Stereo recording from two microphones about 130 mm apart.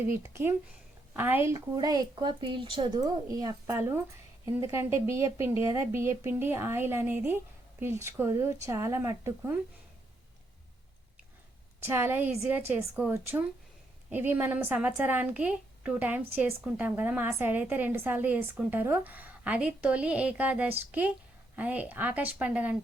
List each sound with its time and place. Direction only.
0.0 s a woman's voice: 20° right (ahead or behind); by 3.0 s 40° right (ahead or behind)
3.2 s speech: 25° right (ahead or behind)
11.8 s a woman's voice: 20° right (ahead or behind)